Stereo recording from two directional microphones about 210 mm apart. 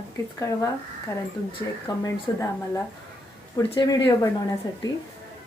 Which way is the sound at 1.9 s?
20° left (ahead or behind).